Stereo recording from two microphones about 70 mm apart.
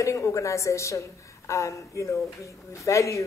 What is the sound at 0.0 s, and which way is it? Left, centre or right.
Speech, left.